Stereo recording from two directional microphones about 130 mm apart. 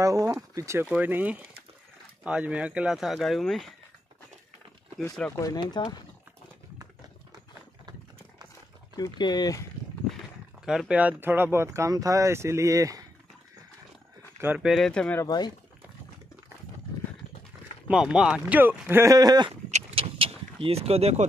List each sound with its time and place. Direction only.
0.0 s speech: 25° right (ahead or behind); by 3.7 s centre (ahead or behind)
5.3 s speech: 30° left (ahead or behind)
8.9 s speech: 30° left (ahead or behind)
10.6 s speech: 5° right (ahead or behind); by 13.0 s 25° right (ahead or behind)
14.4 s speech: 15° right (ahead or behind)
14.7 s speech: 5° left (ahead or behind)
15.1 s speech: 30° left (ahead or behind)
17.8 s speech: 5° right (ahead or behind)
19.1 s speech: 30° right (ahead or behind)
19.5 s a sound: 50° right (ahead or behind)
20.6 s speech: 50° right (ahead or behind)